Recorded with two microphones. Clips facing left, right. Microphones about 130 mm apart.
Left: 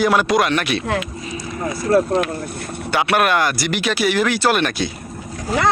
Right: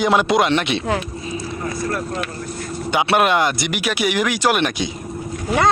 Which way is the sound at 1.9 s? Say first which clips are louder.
Left 13 dB; 30° left (ahead or behind).